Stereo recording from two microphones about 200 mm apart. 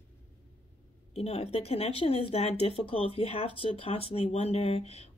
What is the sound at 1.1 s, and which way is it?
Speech, 30° left (ahead or behind).